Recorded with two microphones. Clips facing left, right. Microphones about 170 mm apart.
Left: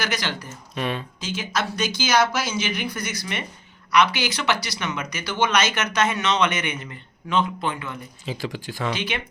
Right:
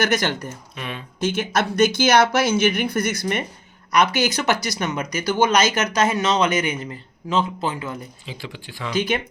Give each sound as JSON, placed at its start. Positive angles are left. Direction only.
{"t": 0.0, "sound": "speech", "side_deg": -50}
{"t": 0.8, "sound": "speech", "side_deg": 35}
{"t": 1.2, "sound": "speech", "side_deg": -55}
{"t": 8.3, "sound": "speech", "side_deg": 40}
{"t": 8.9, "sound": "speech", "side_deg": -45}